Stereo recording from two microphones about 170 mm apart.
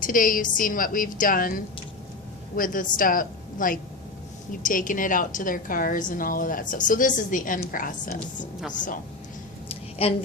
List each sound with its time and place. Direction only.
0.0 s a woman's voice: 55° left (ahead or behind)
10.0 s a woman's voice: 35° left (ahead or behind)